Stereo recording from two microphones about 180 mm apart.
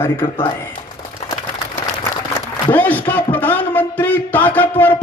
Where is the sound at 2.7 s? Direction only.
10° left (ahead or behind).